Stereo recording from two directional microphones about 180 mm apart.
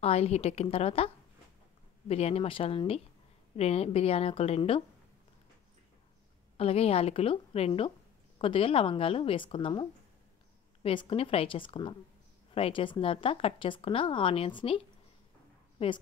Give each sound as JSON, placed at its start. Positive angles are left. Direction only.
{"t": 0.0, "sound": "a woman's voice", "side_deg": 35}
{"t": 6.5, "sound": "a woman's voice", "side_deg": 35}